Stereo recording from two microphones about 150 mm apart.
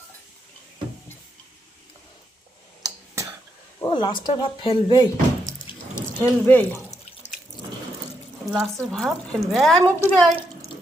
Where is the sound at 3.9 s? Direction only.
30° left (ahead or behind).